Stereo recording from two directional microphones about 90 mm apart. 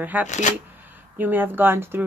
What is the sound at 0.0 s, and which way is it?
Speech, 20° right (ahead or behind).